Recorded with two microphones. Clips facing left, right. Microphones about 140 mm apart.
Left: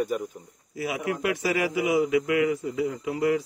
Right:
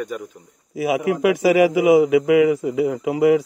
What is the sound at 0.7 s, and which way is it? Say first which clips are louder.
A man's voice: right 9 dB; 90° right.